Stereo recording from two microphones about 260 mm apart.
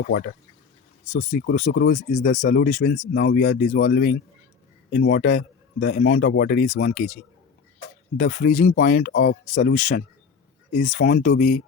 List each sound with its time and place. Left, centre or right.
1.3 s a man's voice: left
8.2 s a man's voice: left